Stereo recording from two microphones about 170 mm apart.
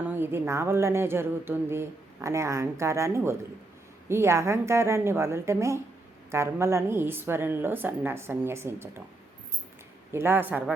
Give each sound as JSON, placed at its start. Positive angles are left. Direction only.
{"t": 0.1, "sound": "speech", "side_deg": -15}
{"t": 10.1, "sound": "speech", "side_deg": -15}